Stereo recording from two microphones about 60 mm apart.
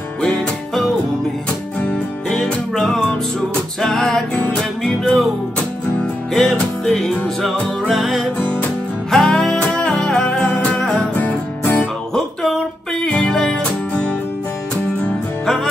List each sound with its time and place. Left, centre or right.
1.8 s music: centre
9.1 s music: centre
11.1 s music: left
13.0 s music: centre
15.4 s music: centre